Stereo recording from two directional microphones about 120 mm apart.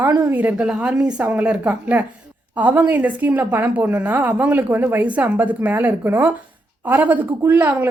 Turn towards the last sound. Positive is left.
turn(degrees=-15)  # may be behind; listen again after turning